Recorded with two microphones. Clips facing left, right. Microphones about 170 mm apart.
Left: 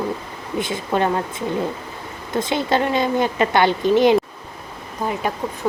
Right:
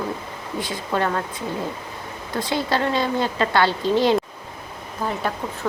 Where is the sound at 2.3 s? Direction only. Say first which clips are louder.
Left 3 dB; 20° left (ahead or behind).